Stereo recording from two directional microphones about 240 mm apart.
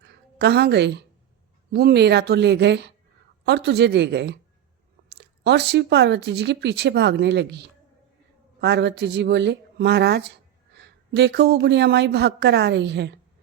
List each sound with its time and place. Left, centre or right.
0.0 s a woman's voice: right